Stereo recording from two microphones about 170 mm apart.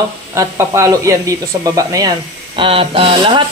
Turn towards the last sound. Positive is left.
turn(degrees=-30)  # may be behind; listen again after turning